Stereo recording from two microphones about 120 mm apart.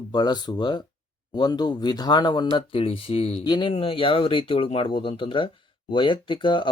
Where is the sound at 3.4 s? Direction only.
40° left (ahead or behind).